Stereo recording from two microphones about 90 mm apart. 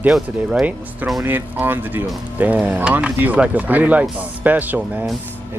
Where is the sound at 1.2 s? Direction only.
20° right (ahead or behind).